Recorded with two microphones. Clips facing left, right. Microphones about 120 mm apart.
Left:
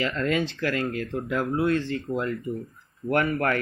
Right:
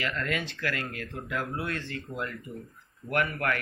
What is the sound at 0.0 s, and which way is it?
Speech, 25° left (ahead or behind).